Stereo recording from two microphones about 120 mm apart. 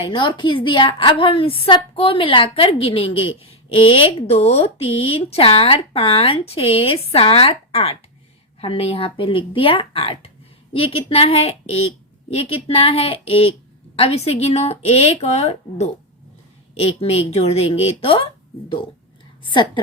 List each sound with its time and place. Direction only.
0.0 s a woman's voice: 45° left (ahead or behind)
19.4 s a woman's voice: 45° left (ahead or behind)